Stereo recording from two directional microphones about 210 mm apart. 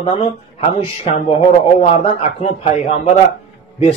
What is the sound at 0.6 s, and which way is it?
Speech, 30° left (ahead or behind).